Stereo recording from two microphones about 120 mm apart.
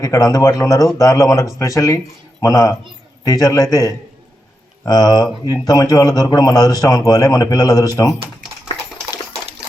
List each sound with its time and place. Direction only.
0.0 s a man's voice: 30° left (ahead or behind)